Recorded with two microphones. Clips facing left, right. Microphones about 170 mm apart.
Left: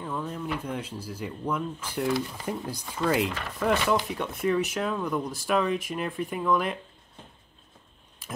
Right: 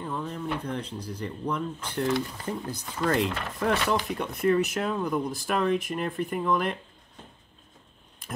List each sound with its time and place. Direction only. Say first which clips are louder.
0.0 s speech: even; centre (ahead or behind)